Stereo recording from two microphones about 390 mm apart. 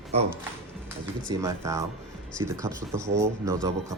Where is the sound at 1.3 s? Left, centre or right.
Centre.